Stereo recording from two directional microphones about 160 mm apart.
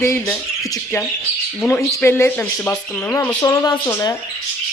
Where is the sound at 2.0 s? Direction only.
15° left (ahead or behind).